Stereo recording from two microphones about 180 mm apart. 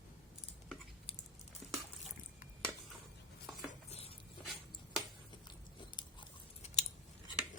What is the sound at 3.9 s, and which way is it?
Cutlery, 35° left (ahead or behind).